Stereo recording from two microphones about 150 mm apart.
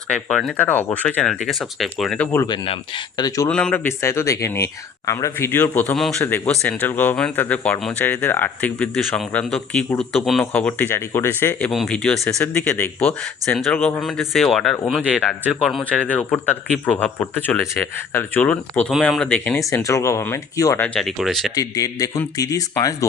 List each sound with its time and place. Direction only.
0.1 s speech: centre (ahead or behind)
0.5 s a man's voice: 10° left (ahead or behind)
2.5 s speech: 30° left (ahead or behind)
3.5 s a man's voice: 10° left (ahead or behind)
6.0 s speech: centre (ahead or behind)
6.2 s a man's voice: 10° left (ahead or behind)
9.0 s a man's voice: centre (ahead or behind)
11.7 s speech: centre (ahead or behind)
12.4 s a man's voice: 15° left (ahead or behind)
14.0 s a man's voice: centre (ahead or behind)
19.5 s speech: 20° left (ahead or behind)
20.8 s speech: 5° left (ahead or behind)
21.5 s speech: 25° left (ahead or behind)